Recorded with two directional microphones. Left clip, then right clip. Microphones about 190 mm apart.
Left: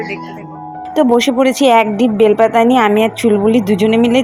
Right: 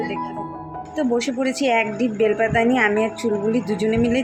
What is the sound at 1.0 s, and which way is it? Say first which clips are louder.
A woman's voice: left 11 dB; 30° left (ahead or behind).